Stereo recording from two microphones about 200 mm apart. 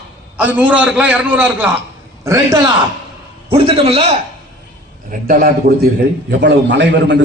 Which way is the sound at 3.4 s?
30° right (ahead or behind).